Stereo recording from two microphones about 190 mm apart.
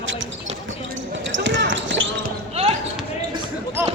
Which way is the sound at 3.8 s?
10° right (ahead or behind).